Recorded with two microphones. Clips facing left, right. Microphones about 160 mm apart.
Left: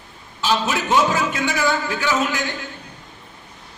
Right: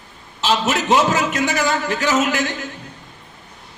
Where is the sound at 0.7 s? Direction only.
75° right (ahead or behind).